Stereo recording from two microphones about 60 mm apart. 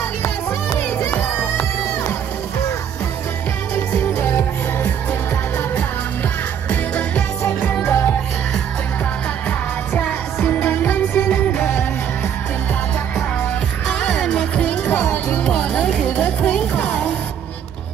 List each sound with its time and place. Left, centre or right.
0.5 s music: left
1.0 s crowd: left
3.7 s music: left
4.3 s music: left
6.7 s music: left
7.8 s music: left
9.9 s music: left
13.8 s music: centre